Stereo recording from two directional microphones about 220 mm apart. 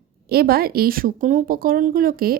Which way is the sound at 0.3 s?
45° right (ahead or behind).